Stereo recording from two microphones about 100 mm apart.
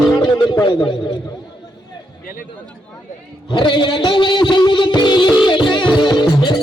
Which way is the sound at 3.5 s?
50° left (ahead or behind).